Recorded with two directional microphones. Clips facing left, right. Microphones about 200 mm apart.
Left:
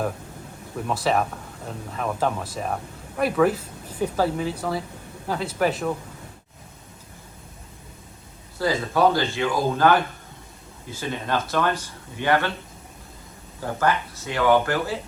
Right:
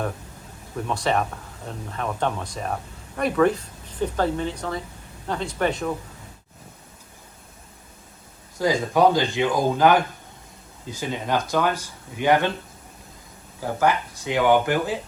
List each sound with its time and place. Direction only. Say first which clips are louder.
0.9 s speech: left 1 dB; 5° left (ahead or behind)
8.5 s speech: right 2 dB; 15° right (ahead or behind)
13.6 s speech: right 1 dB; 10° right (ahead or behind)